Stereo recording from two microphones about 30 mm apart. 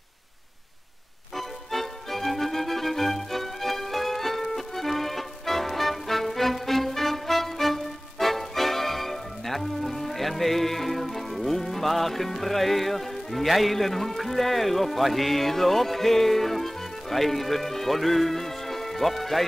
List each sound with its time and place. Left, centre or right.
1.3 s music: centre